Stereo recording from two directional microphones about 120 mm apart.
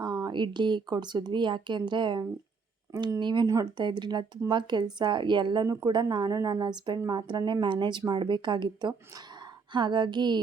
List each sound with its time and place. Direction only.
0.0 s speech: 30° right (ahead or behind)